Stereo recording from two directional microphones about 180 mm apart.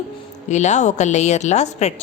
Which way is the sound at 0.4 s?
40° left (ahead or behind).